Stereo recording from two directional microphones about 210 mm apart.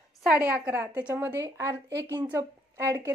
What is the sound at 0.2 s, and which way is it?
A woman's voice, 5° right (ahead or behind).